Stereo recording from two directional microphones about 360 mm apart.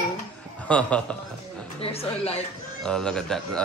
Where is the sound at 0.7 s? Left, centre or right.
Centre.